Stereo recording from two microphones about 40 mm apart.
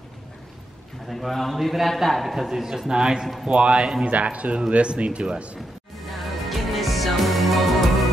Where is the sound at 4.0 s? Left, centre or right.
Right.